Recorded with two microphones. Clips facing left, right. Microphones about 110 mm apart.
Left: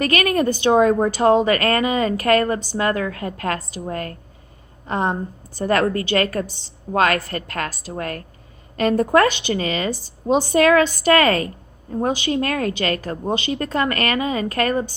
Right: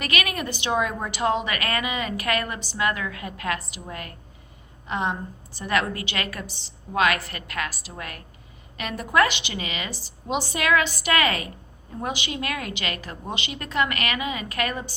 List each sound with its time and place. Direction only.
0.0 s a woman's voice: 35° left (ahead or behind)